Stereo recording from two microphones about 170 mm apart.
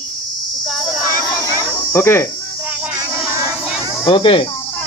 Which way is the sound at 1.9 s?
15° left (ahead or behind).